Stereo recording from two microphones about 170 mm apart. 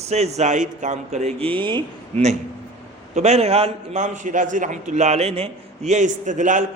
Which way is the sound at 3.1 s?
40° right (ahead or behind).